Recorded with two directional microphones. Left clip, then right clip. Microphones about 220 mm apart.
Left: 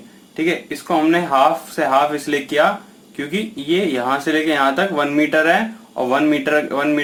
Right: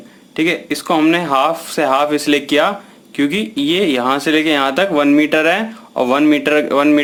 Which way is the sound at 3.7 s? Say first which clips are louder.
Right 3 dB; 40° right (ahead or behind).